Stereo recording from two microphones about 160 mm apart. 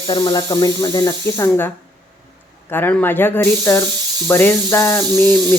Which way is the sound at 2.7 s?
15° left (ahead or behind).